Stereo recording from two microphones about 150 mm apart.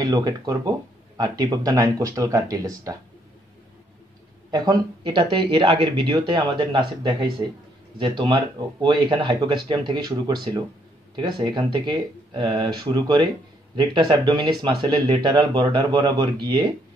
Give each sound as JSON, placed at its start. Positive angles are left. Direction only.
{"t": 0.0, "sound": "speech", "side_deg": -25}
{"t": 4.5, "sound": "speech", "side_deg": -25}